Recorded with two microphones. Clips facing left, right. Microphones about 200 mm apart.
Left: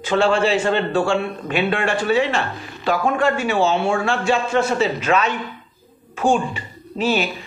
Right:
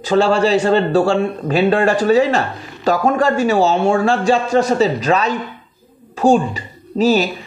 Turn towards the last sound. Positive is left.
turn(degrees=-40)  # may be behind; listen again after turning